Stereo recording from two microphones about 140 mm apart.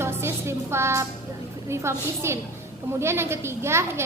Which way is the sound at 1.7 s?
20° right (ahead or behind).